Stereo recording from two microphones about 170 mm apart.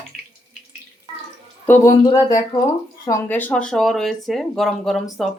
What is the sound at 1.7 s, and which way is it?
Speech, 10° left (ahead or behind).